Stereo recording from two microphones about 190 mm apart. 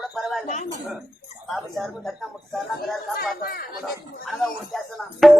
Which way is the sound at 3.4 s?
50° left (ahead or behind).